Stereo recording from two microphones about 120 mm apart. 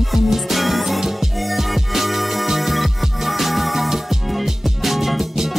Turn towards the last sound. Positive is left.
turn(degrees=0)  # may be behind; listen again after turning